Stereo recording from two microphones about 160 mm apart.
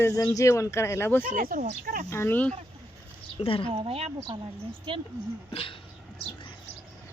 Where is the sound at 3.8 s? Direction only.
35° right (ahead or behind).